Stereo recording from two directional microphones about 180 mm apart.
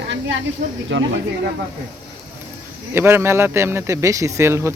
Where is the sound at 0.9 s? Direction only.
85° right.